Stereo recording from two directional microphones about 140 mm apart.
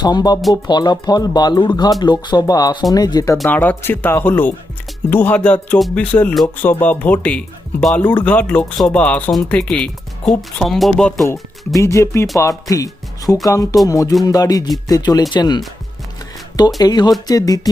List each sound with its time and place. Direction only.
0.0 s speech: 30° left (ahead or behind)
3.5 s speech: 15° left (ahead or behind)
11.8 s speech: 20° left (ahead or behind)